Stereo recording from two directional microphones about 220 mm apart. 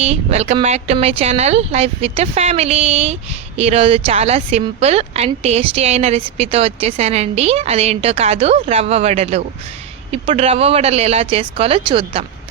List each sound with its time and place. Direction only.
0.0 s a woman's voice: 30° right (ahead or behind)